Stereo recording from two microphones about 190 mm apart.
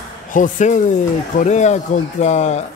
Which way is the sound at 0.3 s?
45° left (ahead or behind).